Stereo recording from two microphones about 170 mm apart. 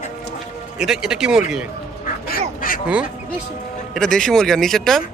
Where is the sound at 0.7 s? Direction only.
5° right (ahead or behind).